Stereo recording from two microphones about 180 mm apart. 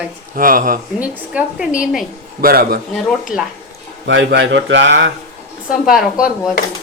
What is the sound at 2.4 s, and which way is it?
Speech, 55° right (ahead or behind).